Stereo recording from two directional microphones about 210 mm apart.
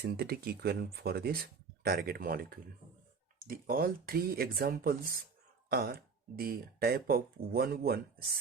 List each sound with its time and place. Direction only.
0.0 s speech: 50° right (ahead or behind)